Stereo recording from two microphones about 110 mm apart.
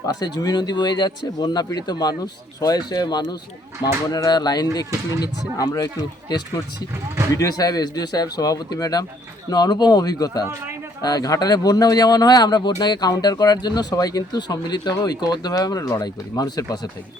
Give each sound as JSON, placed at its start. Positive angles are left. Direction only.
{"t": 0.0, "sound": "speech", "side_deg": 35}